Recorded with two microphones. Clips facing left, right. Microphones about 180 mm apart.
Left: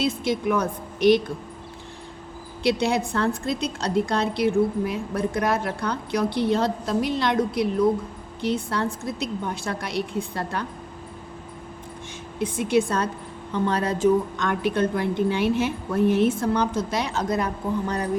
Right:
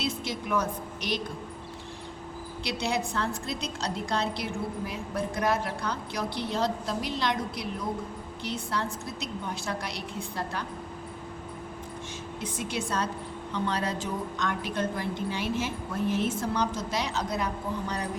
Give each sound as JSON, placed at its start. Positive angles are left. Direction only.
{"t": 0.0, "sound": "a woman's voice", "side_deg": 55}
{"t": 2.6, "sound": "a woman's voice", "side_deg": 55}
{"t": 12.4, "sound": "a woman's voice", "side_deg": 55}